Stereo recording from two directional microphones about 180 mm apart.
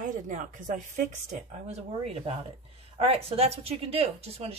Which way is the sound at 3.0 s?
35° right (ahead or behind).